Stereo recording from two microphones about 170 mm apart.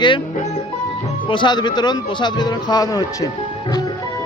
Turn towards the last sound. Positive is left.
turn(degrees=20)  # may be behind; listen again after turning